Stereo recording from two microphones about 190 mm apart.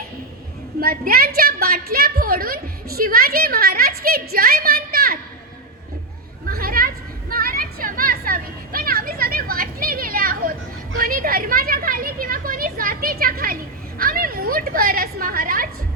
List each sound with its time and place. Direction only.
0.8 s a woman's voice: 50° right (ahead or behind)
6.5 s a sound: 50° right (ahead or behind)
14.0 s a woman's voice: 50° right (ahead or behind)